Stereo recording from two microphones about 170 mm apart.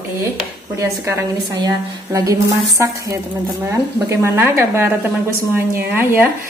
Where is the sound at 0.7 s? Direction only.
15° right (ahead or behind).